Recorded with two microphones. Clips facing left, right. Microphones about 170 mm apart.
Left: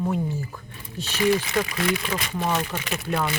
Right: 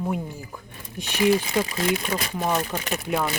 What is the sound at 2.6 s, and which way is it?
Speech, 35° right (ahead or behind).